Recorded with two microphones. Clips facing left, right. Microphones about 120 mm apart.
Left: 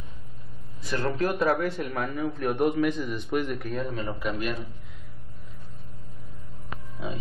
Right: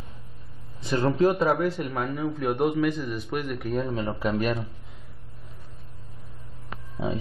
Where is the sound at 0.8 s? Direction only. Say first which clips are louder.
Right 4 dB; 25° right (ahead or behind).